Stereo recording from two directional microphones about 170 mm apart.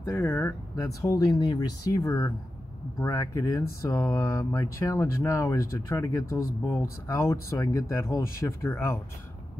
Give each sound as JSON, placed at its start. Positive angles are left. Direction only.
{"t": 0.0, "sound": "speech", "side_deg": 10}